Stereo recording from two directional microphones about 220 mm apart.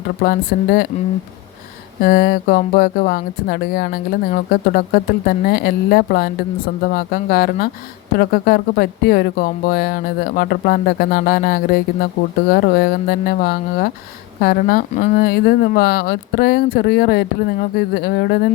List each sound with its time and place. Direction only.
0.2 s speech: 45° left (ahead or behind)
2.0 s speech: 40° left (ahead or behind)